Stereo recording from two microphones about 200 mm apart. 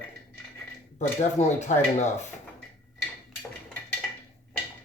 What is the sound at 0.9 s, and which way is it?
Speech, 35° left (ahead or behind).